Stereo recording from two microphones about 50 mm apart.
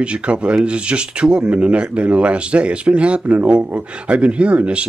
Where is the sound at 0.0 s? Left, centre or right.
Right.